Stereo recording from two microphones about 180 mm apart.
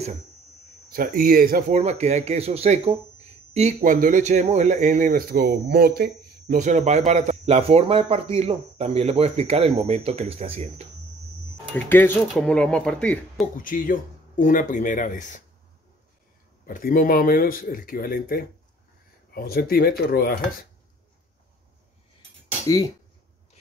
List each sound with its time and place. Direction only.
0.8 s speech: 50° right (ahead or behind)
1.8 s speech: 35° right (ahead or behind); by 6.6 s 60° right (ahead or behind)
6.6 s speech: 40° right (ahead or behind)
11.7 s speech: 10° left (ahead or behind)
13.6 s speech: 50° left (ahead or behind)
16.6 s speech: 50° left (ahead or behind)